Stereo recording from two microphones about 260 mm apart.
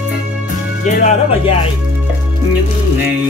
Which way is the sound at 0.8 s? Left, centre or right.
Left.